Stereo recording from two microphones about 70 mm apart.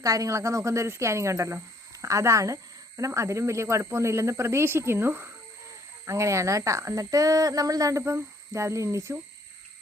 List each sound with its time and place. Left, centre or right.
0.0 s speech: right
6.1 s speech: right